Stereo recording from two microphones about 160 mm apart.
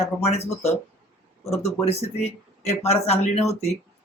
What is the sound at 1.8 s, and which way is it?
Speech, 40° left (ahead or behind).